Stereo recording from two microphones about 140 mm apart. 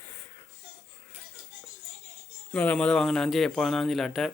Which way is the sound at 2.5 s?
10° left (ahead or behind).